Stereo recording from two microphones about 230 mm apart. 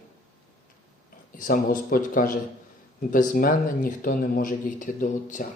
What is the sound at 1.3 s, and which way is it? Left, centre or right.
Speech, left.